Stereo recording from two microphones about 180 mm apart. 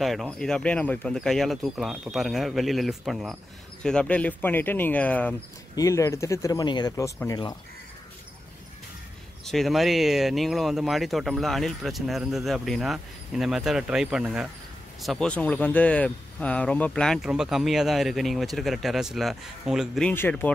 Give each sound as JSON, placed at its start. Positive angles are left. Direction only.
{"t": 0.0, "sound": "speech", "side_deg": 0}
{"t": 9.4, "sound": "speech", "side_deg": 0}
{"t": 20.1, "sound": "speech", "side_deg": 10}